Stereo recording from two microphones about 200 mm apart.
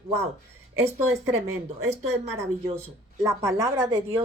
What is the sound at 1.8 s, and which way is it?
Speech, 35° right (ahead or behind).